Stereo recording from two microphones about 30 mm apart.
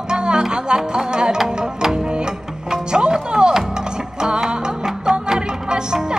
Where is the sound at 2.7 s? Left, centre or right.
Right.